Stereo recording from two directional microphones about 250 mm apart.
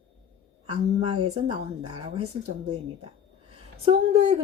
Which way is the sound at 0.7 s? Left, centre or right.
Right.